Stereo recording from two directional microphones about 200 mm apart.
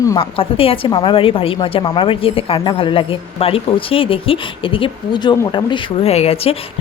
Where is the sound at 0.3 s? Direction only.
30° left (ahead or behind).